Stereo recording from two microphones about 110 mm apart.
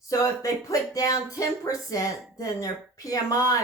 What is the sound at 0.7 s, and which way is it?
Speech, 30° left (ahead or behind).